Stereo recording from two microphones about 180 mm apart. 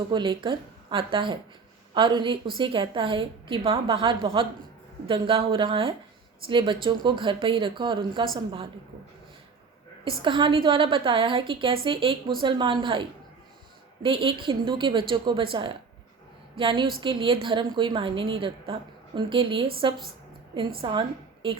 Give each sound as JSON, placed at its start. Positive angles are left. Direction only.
{"t": 0.1, "sound": "a woman's voice", "side_deg": -25}
{"t": 10.2, "sound": "a woman's voice", "side_deg": -30}